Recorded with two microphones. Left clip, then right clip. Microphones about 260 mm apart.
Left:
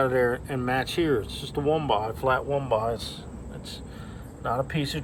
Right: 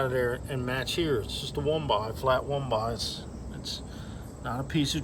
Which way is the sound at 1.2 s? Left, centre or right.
Centre.